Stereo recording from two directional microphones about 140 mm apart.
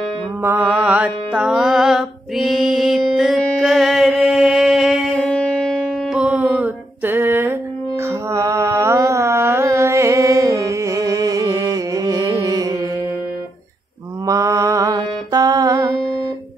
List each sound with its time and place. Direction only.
0.4 s music: 15° right (ahead or behind)
14.2 s mantra: 25° right (ahead or behind)